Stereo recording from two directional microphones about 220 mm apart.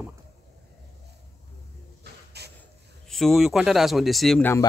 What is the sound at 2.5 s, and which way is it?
Speech, centre (ahead or behind).